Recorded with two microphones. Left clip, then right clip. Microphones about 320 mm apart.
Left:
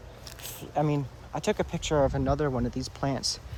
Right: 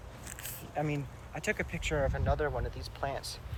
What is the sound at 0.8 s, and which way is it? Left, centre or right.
Speech, left.